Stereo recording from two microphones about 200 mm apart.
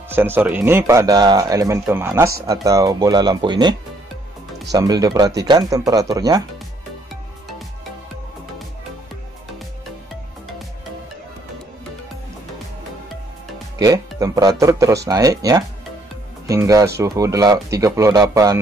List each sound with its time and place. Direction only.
0.1 s speech: 10° right (ahead or behind)
4.7 s speech: 20° right (ahead or behind)
13.7 s speech: 15° right (ahead or behind)